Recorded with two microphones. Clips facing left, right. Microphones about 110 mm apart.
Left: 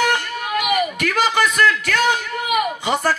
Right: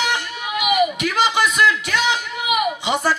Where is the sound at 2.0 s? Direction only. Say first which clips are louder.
Left 2 dB; 50° left (ahead or behind).